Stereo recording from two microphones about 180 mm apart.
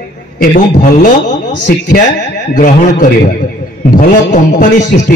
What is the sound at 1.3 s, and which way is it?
Speech, 70° left (ahead or behind).